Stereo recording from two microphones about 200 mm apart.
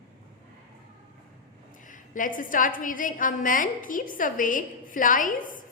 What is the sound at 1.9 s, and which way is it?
A woman's voice, 40° left (ahead or behind).